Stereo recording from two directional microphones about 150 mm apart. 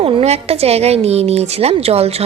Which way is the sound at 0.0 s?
40° right (ahead or behind).